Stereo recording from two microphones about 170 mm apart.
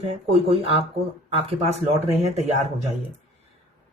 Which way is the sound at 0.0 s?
35° right (ahead or behind).